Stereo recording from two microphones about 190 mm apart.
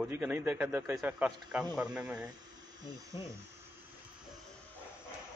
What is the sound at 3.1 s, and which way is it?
Speech, 25° left (ahead or behind).